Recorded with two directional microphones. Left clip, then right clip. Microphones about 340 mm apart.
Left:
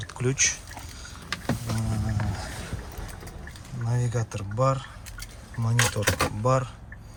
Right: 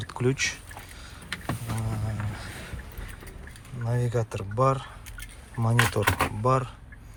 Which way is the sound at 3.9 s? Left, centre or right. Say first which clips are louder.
Right 3 dB; centre.